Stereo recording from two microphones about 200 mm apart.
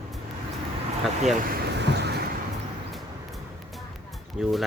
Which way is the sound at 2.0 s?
55° right (ahead or behind).